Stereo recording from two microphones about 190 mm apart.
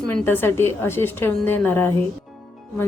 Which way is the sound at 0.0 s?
10° left (ahead or behind).